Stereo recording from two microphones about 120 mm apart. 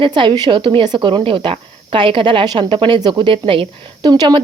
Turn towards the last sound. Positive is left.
turn(degrees=-35)  # may be behind; listen again after turning